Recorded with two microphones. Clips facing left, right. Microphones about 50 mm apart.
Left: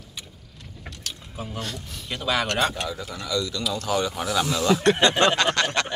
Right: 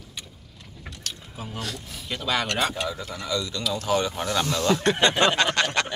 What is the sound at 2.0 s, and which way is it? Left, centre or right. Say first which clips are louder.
Speech: left 1 dB; centre.